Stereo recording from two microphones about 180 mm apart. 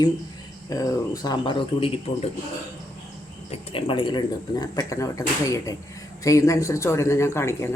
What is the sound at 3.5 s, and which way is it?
Speech, 30° left (ahead or behind).